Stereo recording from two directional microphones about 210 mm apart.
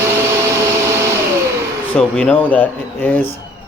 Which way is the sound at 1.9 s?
5° left (ahead or behind).